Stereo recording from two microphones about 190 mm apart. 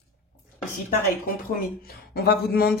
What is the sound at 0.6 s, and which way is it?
Speech, 50° left (ahead or behind).